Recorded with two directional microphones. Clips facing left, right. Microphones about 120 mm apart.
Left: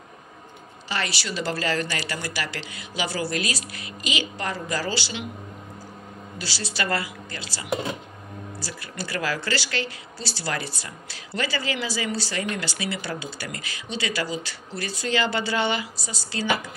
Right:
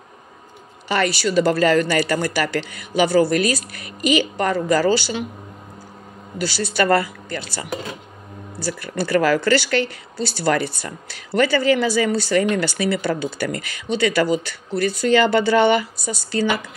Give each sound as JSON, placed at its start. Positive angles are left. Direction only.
{"t": 0.8, "sound": "speech", "side_deg": -50}
{"t": 6.3, "sound": "speech", "side_deg": -50}